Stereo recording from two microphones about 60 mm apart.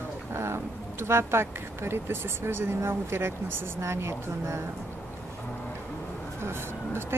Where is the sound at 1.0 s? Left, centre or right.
Right.